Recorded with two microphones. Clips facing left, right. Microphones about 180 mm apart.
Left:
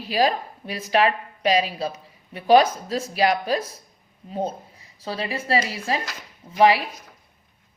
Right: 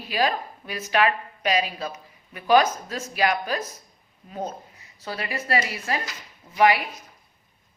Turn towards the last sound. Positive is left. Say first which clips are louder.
# left 2 dB
turn(degrees=30)  # may be behind; listen again after turning